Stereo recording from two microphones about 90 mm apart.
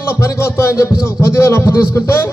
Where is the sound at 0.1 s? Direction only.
30° left (ahead or behind).